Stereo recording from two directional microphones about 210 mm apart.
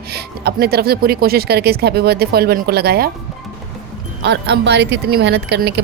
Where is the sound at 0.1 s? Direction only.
50° right (ahead or behind).